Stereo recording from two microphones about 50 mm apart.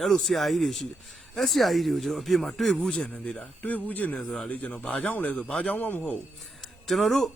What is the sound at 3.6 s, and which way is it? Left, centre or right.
Speech, left.